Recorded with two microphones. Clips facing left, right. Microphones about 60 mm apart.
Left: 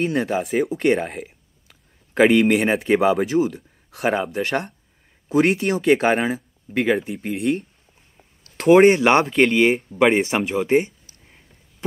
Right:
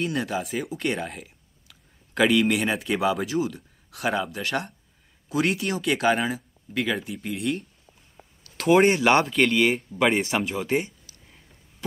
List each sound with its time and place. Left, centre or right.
0.0 s speech: left
0.4 s speech: left
7.3 s speech: left
8.2 s a sound: centre
8.6 s speech: left
10.3 s speech: left
11.1 s a sound: left